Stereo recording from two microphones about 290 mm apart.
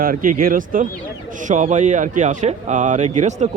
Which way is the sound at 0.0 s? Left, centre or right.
Right.